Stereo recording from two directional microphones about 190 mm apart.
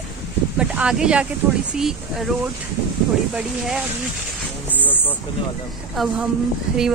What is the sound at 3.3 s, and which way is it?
Speech, 5° right (ahead or behind).